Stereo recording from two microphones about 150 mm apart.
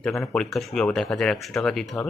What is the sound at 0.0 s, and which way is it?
Speech, 5° left (ahead or behind).